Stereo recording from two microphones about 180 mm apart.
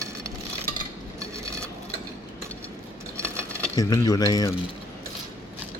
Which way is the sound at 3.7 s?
20° left (ahead or behind).